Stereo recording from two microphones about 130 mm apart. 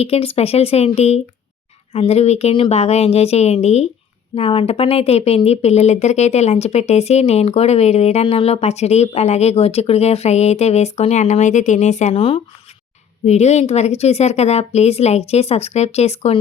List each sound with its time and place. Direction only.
0.0 s speech: 50° left (ahead or behind)
13.2 s speech: 60° left (ahead or behind)